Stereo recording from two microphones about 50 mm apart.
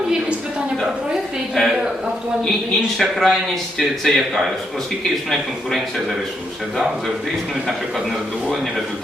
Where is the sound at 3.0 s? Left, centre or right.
Centre.